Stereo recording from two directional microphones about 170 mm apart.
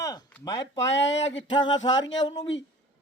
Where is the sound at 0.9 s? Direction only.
90° left.